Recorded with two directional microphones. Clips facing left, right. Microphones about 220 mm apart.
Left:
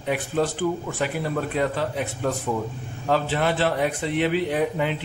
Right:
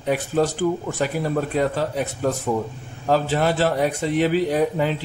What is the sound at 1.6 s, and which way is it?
Speech, 40° right (ahead or behind).